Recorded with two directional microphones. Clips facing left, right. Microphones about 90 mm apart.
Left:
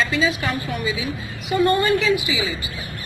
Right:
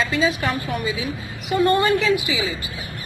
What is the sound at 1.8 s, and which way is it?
Speech, 50° right (ahead or behind).